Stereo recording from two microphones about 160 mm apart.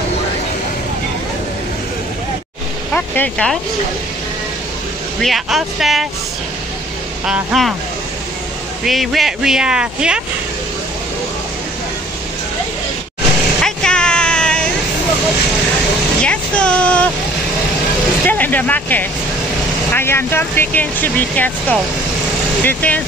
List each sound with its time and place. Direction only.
2.9 s speech: 5° left (ahead or behind)
5.2 s speech: centre (ahead or behind)
7.2 s speech: centre (ahead or behind)
8.8 s speech: centre (ahead or behind)
13.6 s a sound: 5° left (ahead or behind)
16.3 s music: 5° left (ahead or behind)
18.2 s speech: 10° left (ahead or behind)